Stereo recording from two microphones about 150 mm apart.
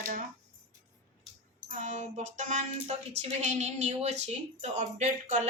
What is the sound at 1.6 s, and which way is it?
Speech, 55° right (ahead or behind).